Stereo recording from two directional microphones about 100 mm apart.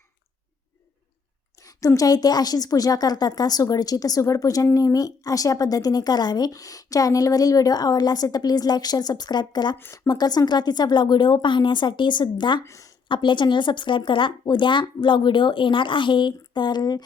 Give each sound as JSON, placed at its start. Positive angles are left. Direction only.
{"t": 1.6, "sound": "a woman's voice", "side_deg": 35}
{"t": 9.7, "sound": "a woman's voice", "side_deg": 25}
{"t": 10.1, "sound": "speech", "side_deg": 40}
{"t": 12.6, "sound": "a woman's voice", "side_deg": 30}
{"t": 13.1, "sound": "speech", "side_deg": 55}